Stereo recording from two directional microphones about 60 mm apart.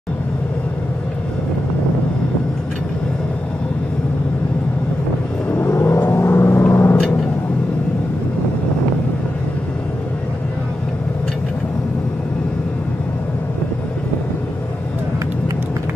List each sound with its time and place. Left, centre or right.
6.0 s vehicle: left